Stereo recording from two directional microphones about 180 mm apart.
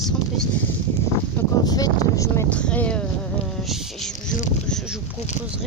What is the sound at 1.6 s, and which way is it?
Speech, 20° left (ahead or behind).